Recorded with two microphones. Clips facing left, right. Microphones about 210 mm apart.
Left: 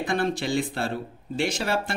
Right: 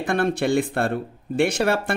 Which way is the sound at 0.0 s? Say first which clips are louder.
Right 4 dB; 55° right (ahead or behind).